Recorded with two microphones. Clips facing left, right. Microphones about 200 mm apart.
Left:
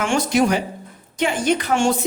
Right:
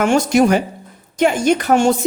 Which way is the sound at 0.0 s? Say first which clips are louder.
Right 5 dB; 45° right (ahead or behind).